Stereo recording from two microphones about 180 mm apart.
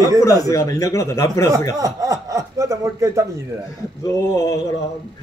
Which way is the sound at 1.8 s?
20° right (ahead or behind).